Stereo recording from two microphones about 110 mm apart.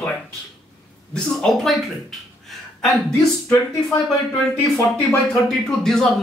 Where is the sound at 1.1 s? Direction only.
5° left (ahead or behind).